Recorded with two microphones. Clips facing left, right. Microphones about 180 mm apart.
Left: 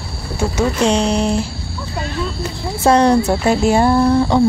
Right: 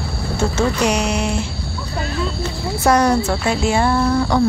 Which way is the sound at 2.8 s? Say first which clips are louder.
Left 3 dB; 30° left (ahead or behind).